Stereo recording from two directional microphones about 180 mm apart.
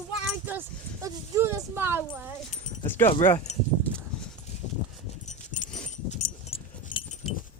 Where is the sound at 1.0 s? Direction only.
15° right (ahead or behind).